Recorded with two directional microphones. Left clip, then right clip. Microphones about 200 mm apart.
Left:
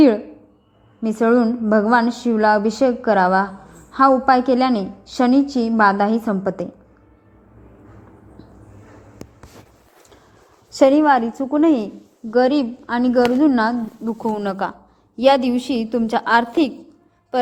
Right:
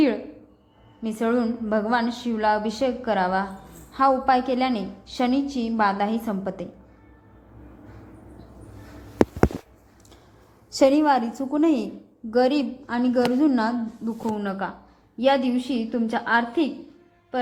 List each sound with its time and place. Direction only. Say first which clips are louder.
1.0 s a woman's voice: left 8 dB; 35° left (ahead or behind)
10.8 s a woman's voice: left 5 dB; 25° left (ahead or behind)
14.3 s a woman's voice: left 6 dB; 60° left (ahead or behind)